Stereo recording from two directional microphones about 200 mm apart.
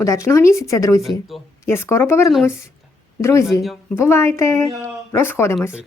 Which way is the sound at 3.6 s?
Centre (ahead or behind).